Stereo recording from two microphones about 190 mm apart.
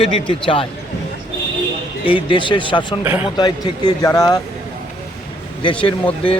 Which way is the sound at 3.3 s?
20° left (ahead or behind).